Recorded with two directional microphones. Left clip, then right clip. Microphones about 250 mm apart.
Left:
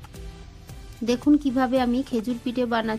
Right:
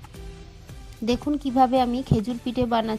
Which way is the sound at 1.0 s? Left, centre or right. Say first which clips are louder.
Left 4 dB; right.